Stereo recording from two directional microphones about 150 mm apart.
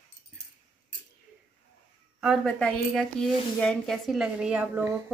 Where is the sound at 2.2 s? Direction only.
Centre (ahead or behind).